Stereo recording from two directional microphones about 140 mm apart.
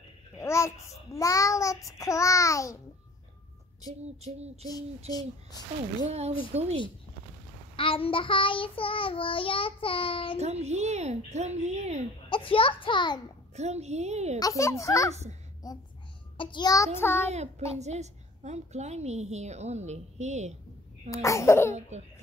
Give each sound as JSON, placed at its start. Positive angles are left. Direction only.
{"t": 0.4, "sound": "child singing", "side_deg": 20}
{"t": 3.8, "sound": "a woman's voice", "side_deg": -50}
{"t": 6.0, "sound": "a woman's voice", "side_deg": -50}
{"t": 7.7, "sound": "child singing", "side_deg": 40}
{"t": 10.4, "sound": "a woman's voice", "side_deg": -50}
{"t": 12.3, "sound": "child singing", "side_deg": 40}
{"t": 13.6, "sound": "a woman's voice", "side_deg": -50}
{"t": 14.4, "sound": "child singing", "side_deg": 20}
{"t": 17.3, "sound": "a woman's voice", "side_deg": -50}
{"t": 21.1, "sound": "child singing", "side_deg": 20}